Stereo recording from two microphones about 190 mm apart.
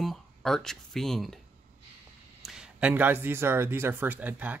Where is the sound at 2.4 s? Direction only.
5° right (ahead or behind).